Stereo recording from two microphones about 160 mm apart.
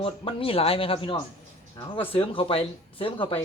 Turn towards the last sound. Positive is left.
turn(degrees=35)  # may be behind; listen again after turning